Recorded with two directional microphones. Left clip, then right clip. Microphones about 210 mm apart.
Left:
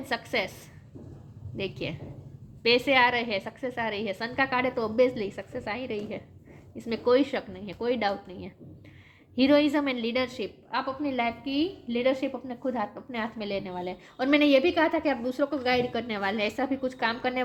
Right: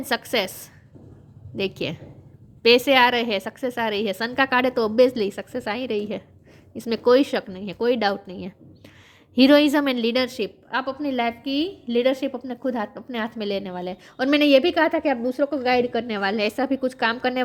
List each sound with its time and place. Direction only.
0.0 s a woman's voice: 50° right (ahead or behind)